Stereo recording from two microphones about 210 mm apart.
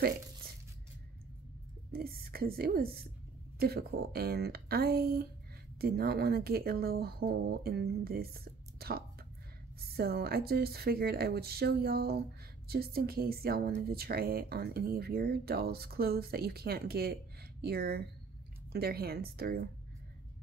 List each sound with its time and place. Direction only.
1.9 s a woman's voice: 45° right (ahead or behind)